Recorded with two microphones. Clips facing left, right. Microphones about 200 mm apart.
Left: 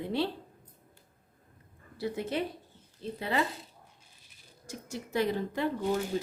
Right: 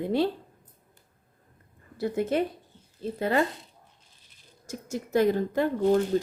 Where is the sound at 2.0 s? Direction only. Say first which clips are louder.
Right 6 dB; 50° right (ahead or behind).